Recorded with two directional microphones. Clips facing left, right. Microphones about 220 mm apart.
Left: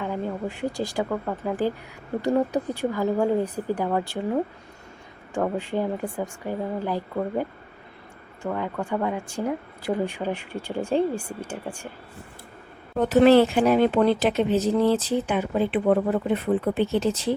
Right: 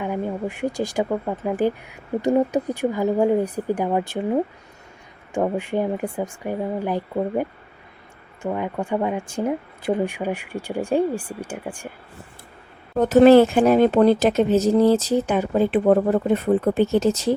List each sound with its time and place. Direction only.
0.0 s speech: 15° right (ahead or behind)
8.4 s speech: 15° right (ahead or behind)
13.0 s speech: 45° right (ahead or behind)